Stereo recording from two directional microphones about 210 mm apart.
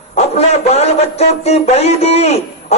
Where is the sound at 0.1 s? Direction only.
30° left (ahead or behind).